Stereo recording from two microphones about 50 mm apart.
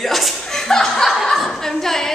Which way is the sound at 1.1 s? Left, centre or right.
Centre.